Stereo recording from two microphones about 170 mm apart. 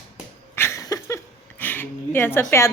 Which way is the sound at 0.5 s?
15° left (ahead or behind).